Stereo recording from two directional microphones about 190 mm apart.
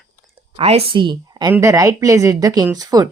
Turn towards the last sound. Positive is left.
turn(degrees=-20)  # may be behind; listen again after turning